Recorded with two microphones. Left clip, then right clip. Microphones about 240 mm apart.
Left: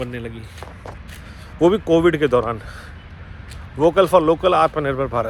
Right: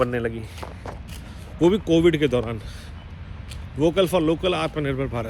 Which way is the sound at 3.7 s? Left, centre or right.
Centre.